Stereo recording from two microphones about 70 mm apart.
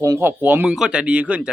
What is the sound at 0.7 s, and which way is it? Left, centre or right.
Speech, centre.